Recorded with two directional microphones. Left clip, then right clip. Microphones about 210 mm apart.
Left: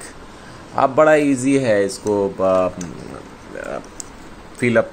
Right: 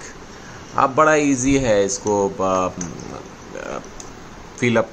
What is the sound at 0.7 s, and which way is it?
Speech, centre (ahead or behind).